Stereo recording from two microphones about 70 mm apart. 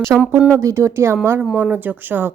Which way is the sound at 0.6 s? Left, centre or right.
Right.